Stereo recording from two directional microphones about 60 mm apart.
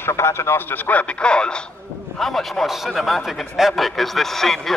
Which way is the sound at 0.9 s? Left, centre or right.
Centre.